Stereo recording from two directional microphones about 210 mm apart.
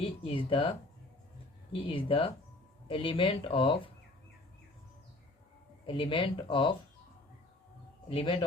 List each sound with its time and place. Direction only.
0.0 s speech: 25° left (ahead or behind)
5.8 s speech: 25° left (ahead or behind)
8.1 s speech: 25° left (ahead or behind)